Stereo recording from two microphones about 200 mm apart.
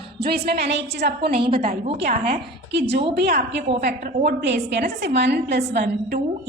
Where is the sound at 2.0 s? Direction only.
50° right (ahead or behind).